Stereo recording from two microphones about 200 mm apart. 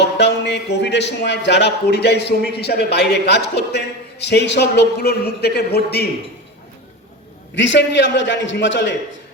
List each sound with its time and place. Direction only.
0.0 s a man's voice: 60° left (ahead or behind)
7.5 s a man's voice: 65° left (ahead or behind)